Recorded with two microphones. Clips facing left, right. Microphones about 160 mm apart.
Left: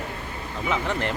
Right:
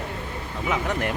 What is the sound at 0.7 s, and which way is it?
Speech, 10° right (ahead or behind).